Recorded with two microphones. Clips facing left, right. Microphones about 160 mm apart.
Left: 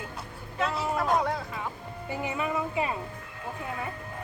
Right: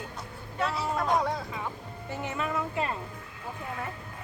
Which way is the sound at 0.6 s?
Centre (ahead or behind).